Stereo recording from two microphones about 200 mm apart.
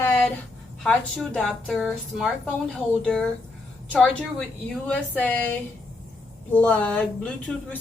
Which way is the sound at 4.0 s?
5° left (ahead or behind).